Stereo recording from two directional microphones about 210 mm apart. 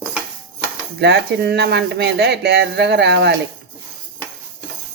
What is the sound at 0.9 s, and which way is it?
Speech, 55° right (ahead or behind).